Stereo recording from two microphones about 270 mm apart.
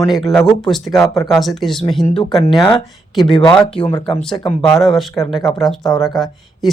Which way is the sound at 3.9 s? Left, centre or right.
Centre.